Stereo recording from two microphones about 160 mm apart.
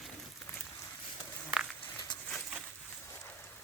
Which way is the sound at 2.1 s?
30° left (ahead or behind).